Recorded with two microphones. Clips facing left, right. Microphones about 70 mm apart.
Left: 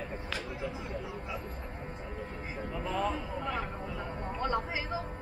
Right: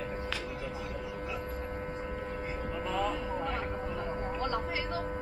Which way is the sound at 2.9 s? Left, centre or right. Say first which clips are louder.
Even; centre.